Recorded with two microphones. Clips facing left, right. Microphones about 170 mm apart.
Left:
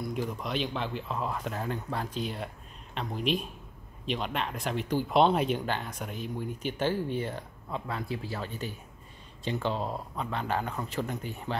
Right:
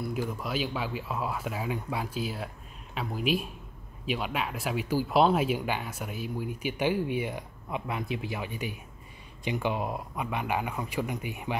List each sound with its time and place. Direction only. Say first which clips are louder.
0.1 s speech: right 1 dB; 5° right (ahead or behind)